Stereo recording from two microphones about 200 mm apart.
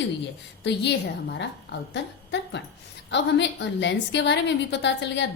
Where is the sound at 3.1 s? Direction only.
60° left (ahead or behind).